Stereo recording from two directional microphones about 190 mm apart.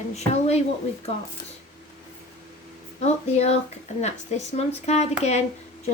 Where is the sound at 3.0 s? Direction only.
35° left (ahead or behind).